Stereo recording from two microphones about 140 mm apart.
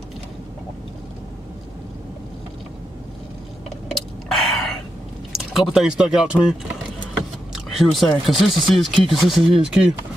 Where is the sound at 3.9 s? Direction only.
Centre (ahead or behind).